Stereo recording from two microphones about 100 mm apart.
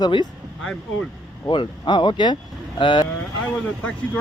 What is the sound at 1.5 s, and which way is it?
Speech, 45° left (ahead or behind).